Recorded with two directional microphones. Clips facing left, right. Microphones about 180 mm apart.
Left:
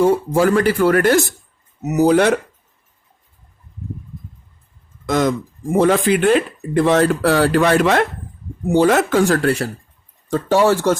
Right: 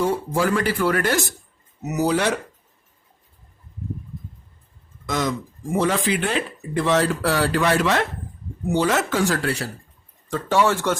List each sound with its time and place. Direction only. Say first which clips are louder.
0.0 s speech: left 7 dB; 50° left (ahead or behind)
5.0 s speech: left 7 dB; 55° left (ahead or behind)
10.2 s speech: left 5 dB; 40° left (ahead or behind)